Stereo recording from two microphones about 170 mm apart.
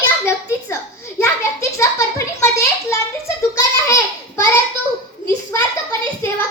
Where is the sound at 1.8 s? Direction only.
15° left (ahead or behind).